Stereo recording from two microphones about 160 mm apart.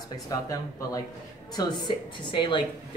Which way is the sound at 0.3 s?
20° left (ahead or behind).